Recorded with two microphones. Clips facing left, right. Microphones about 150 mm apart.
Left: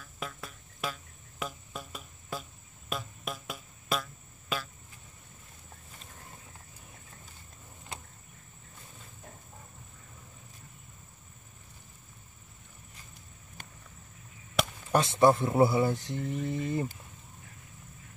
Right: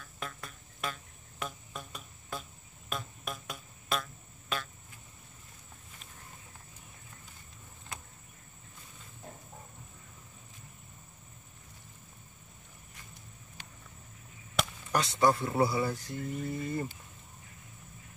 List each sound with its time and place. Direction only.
0.0 s insect: centre (ahead or behind)
2.9 s music: centre (ahead or behind)
7.9 s a sound: 30° left (ahead or behind)
14.9 s speech: 25° left (ahead or behind)